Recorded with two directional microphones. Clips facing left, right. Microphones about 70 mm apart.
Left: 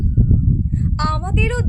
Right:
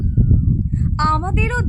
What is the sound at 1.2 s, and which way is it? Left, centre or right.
Speech, right.